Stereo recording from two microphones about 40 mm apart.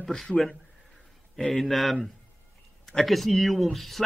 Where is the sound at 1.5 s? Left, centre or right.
Centre.